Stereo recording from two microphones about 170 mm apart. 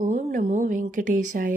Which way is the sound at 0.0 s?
45° right (ahead or behind).